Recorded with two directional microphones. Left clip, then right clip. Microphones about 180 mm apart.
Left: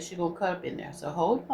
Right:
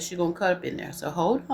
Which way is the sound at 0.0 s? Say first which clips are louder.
Right 4 dB; 55° right (ahead or behind).